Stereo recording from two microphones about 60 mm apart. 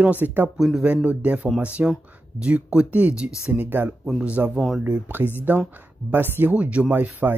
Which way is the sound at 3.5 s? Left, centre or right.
Right.